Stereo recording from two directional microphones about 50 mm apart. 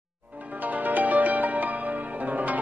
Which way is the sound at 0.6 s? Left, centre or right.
Right.